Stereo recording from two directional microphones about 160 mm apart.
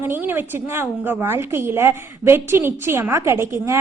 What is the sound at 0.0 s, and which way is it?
A woman's voice, 15° right (ahead or behind).